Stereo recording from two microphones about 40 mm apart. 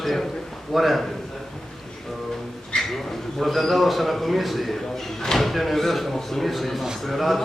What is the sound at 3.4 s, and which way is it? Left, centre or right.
A man's voice, centre.